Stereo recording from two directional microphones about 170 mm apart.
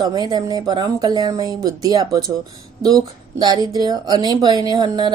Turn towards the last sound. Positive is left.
turn(degrees=-25)  # may be behind; listen again after turning